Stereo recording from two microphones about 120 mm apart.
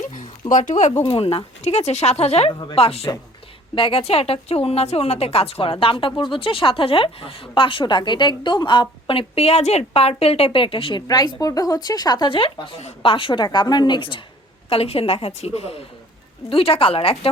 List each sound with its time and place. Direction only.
0.5 s speech: 90° left
1.6 s a woman's voice: 65° left (ahead or behind)
2.5 s speech: 35° left (ahead or behind)
2.7 s a woman's voice: 55° left (ahead or behind)
11.1 s speech: 35° left (ahead or behind)
14.7 s a woman's voice: 55° left (ahead or behind)